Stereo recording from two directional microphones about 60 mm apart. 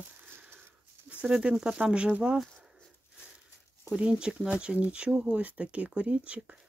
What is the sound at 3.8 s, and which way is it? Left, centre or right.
Speech, centre.